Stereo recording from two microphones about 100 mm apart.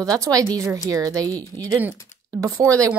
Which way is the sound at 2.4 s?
35° right (ahead or behind).